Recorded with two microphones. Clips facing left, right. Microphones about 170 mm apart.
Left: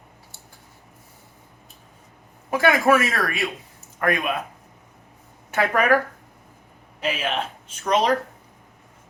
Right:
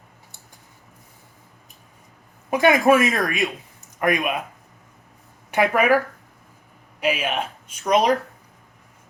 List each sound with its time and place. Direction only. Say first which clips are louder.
2.5 s speech: right 2 dB; 20° right (ahead or behind)
5.5 s speech: right 2 dB; 10° right (ahead or behind)
7.0 s speech: right 2 dB; 10° right (ahead or behind)